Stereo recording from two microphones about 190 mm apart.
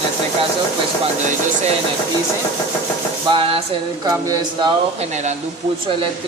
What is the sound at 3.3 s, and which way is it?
Music, 30° right (ahead or behind).